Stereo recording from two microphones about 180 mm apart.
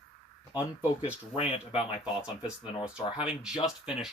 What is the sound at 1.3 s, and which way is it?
Speech, 30° left (ahead or behind).